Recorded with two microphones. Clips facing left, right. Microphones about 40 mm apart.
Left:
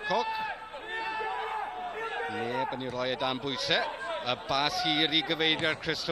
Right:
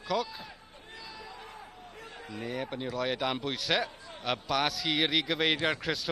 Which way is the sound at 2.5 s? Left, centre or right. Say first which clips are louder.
Left 3 dB; centre.